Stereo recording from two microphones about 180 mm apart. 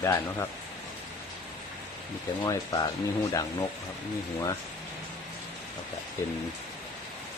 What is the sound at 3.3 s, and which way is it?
Speech, 20° left (ahead or behind).